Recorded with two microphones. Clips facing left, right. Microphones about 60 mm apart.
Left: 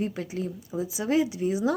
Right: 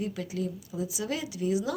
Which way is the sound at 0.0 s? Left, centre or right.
Left.